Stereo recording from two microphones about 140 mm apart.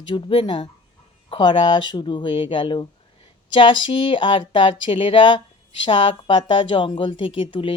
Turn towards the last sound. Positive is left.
turn(degrees=35)  # may be behind; listen again after turning